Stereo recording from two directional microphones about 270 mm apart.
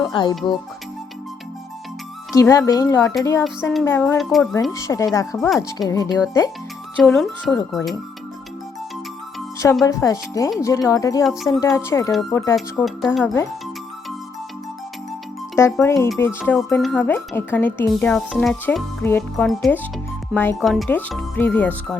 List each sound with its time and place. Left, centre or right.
0.0 s speech: centre
2.3 s speech: centre
3.4 s speech: centre
4.7 s speech: centre
9.8 s speech: centre
15.5 s speech: centre